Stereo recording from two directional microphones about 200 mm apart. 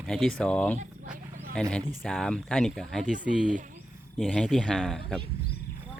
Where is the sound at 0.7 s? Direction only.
40° right (ahead or behind).